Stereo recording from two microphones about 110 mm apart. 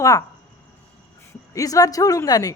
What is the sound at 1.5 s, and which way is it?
Speech, 35° left (ahead or behind).